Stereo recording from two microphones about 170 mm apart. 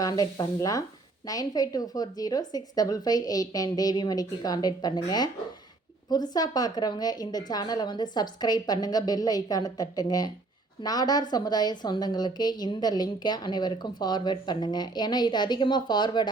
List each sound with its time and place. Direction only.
0.0 s a woman's voice: 25° left (ahead or behind)